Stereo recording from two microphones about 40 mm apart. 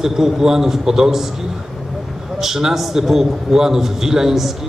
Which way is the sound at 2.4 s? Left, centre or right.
Centre.